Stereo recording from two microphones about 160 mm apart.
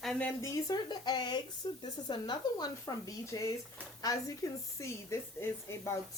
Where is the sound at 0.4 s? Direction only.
25° left (ahead or behind).